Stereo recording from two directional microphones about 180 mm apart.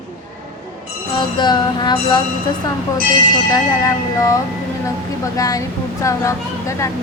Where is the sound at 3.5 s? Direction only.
20° left (ahead or behind).